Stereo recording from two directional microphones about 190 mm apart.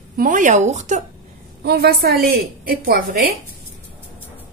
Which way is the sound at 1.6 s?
55° right (ahead or behind).